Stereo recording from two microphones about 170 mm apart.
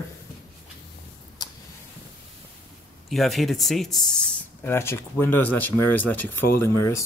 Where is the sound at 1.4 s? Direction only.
20° left (ahead or behind).